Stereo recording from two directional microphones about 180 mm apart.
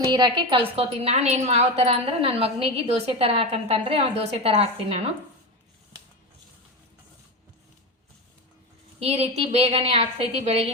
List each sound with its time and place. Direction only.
0.1 s a woman's voice: 25° right (ahead or behind)
9.0 s a woman's voice: 35° right (ahead or behind)